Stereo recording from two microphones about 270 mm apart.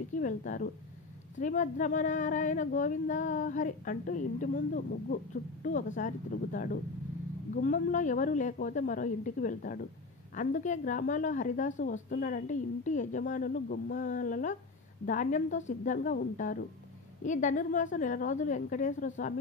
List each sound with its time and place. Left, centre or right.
0.1 s speech: left